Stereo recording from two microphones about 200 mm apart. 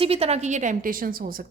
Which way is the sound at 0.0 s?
30° right (ahead or behind).